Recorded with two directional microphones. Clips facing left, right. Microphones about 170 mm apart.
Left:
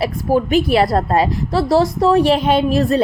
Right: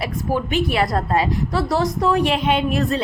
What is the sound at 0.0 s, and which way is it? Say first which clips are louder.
A woman's voice: left 6 dB; 35° left (ahead or behind).